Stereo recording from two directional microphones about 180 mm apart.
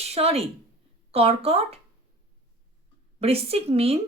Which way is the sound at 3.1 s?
35° right (ahead or behind).